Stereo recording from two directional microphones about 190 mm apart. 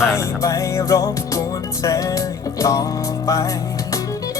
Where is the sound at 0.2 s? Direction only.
15° left (ahead or behind).